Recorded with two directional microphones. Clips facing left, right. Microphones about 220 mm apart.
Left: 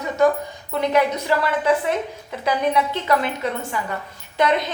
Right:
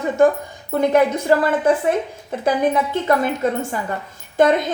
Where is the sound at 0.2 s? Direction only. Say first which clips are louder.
Right 2 dB; 50° right (ahead or behind).